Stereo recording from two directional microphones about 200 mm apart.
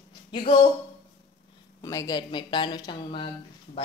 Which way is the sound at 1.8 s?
15° left (ahead or behind).